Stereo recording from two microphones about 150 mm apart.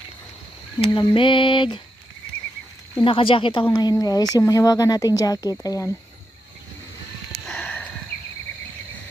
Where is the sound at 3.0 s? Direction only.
35° left (ahead or behind).